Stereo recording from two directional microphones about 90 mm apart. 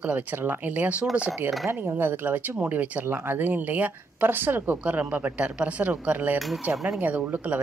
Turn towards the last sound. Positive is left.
turn(degrees=-20)  # may be behind; listen again after turning